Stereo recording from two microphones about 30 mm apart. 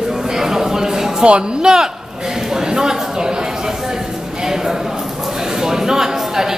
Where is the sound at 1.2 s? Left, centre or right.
Right.